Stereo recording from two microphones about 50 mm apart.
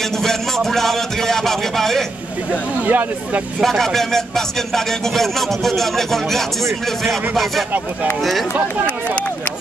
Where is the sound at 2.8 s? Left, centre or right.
Right.